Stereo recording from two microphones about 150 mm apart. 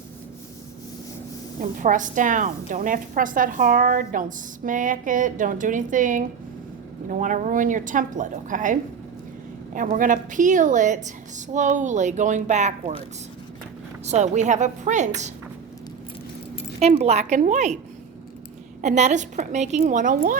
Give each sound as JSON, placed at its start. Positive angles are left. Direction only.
{"t": 1.5, "sound": "a woman's voice", "side_deg": -60}
{"t": 14.0, "sound": "a woman's voice", "side_deg": -50}
{"t": 16.9, "sound": "a woman's voice", "side_deg": -50}
{"t": 18.8, "sound": "a woman's voice", "side_deg": -50}